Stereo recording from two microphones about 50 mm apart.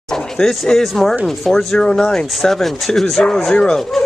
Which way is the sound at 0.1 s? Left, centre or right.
Centre.